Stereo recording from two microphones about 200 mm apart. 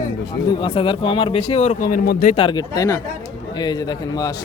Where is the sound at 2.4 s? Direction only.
20° left (ahead or behind).